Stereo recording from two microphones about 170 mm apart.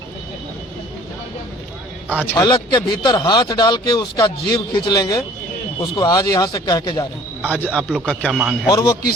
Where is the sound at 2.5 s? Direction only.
25° left (ahead or behind).